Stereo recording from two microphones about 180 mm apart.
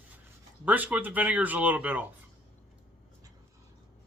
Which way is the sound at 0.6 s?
10° right (ahead or behind).